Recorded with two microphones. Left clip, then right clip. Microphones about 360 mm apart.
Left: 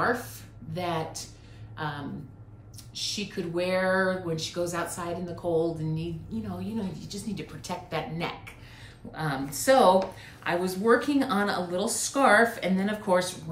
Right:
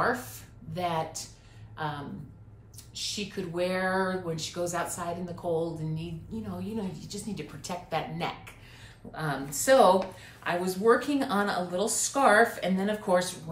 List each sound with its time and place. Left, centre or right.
0.0 s a woman's voice: centre